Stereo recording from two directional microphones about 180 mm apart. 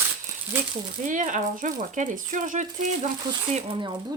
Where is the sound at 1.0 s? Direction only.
45° right (ahead or behind).